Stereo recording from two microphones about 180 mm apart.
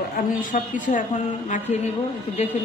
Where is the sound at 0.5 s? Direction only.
45° left (ahead or behind).